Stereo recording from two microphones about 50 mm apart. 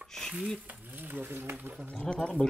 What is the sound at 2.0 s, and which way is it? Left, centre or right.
Speech, centre.